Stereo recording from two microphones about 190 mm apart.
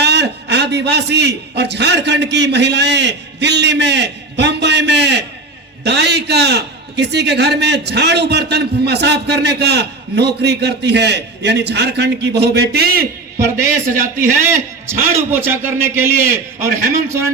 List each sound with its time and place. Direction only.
0.0 s a man's voice: 60° right (ahead or behind)
13.4 s a man's voice: 15° right (ahead or behind)
16.6 s speech: 45° right (ahead or behind)